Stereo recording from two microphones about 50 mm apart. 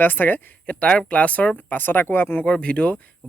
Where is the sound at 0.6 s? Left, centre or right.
Left.